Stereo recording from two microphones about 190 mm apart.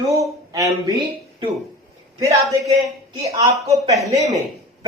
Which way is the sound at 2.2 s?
15° right (ahead or behind).